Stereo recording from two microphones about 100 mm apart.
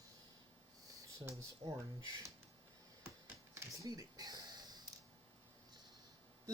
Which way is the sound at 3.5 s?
30° right (ahead or behind).